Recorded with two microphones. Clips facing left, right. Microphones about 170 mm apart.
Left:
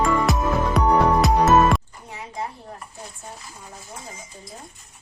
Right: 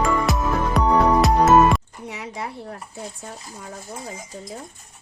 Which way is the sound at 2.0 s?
80° right.